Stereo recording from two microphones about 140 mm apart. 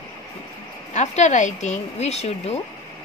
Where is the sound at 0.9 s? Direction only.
55° left (ahead or behind).